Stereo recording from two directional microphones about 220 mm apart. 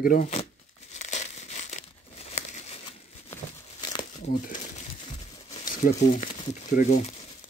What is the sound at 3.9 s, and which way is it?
Crumpling, 20° left (ahead or behind).